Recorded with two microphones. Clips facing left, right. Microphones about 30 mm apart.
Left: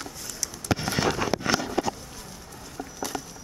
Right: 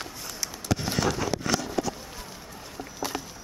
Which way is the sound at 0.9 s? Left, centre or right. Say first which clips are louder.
Left 2 dB; centre.